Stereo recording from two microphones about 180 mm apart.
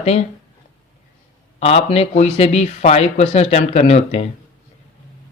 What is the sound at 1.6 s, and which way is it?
Speech, 35° left (ahead or behind).